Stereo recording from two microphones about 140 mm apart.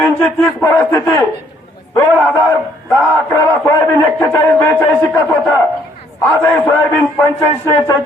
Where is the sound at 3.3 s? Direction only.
20° left (ahead or behind).